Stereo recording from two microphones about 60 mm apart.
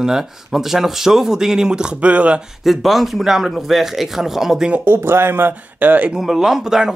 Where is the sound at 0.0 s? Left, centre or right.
Centre.